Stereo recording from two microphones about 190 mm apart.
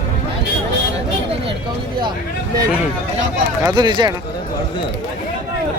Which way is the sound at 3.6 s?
25° right (ahead or behind).